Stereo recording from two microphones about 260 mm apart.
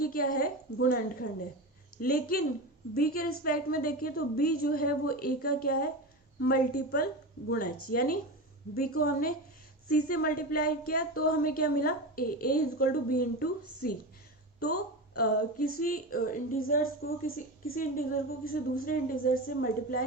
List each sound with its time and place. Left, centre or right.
0.0 s a woman's voice: left
15.1 s a woman's voice: left